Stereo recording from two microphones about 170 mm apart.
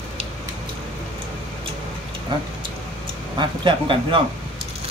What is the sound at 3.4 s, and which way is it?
Speech, 30° right (ahead or behind).